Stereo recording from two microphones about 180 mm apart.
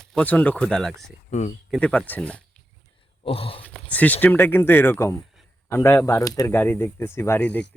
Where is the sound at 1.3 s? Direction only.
40° left (ahead or behind).